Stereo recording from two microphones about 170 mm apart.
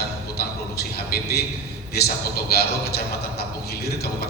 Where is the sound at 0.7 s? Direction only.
70° left (ahead or behind).